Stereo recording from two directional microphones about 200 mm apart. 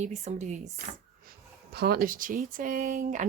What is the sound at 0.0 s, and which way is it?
Speech, 35° right (ahead or behind).